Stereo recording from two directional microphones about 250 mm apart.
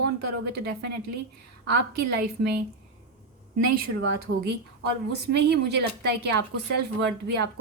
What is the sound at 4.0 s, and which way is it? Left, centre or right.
A woman's voice, right.